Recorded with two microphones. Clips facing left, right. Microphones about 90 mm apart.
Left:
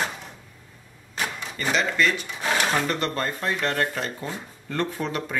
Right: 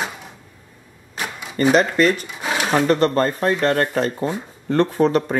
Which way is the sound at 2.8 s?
40° right (ahead or behind).